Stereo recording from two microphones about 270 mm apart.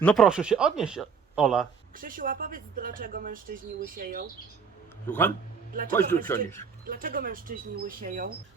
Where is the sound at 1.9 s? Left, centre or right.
Right.